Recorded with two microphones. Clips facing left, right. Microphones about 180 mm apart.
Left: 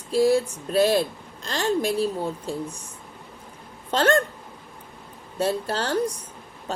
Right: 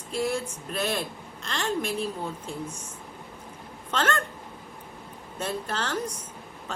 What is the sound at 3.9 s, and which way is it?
Speech, 35° left (ahead or behind).